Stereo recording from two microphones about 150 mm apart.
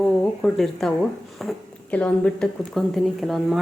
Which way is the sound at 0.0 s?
Centre (ahead or behind).